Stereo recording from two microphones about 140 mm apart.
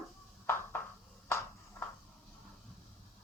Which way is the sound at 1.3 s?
20° left (ahead or behind).